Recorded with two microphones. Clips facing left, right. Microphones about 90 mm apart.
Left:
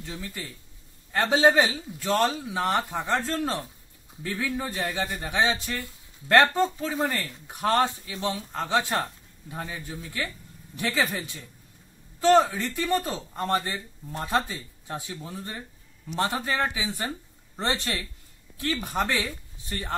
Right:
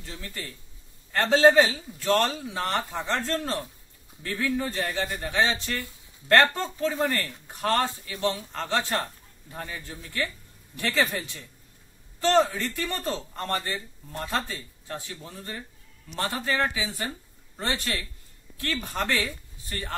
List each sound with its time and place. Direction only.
0.0 s speech: 15° left (ahead or behind)
12.2 s speech: 10° left (ahead or behind)